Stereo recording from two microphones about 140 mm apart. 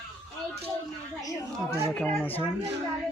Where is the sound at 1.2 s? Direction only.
25° left (ahead or behind).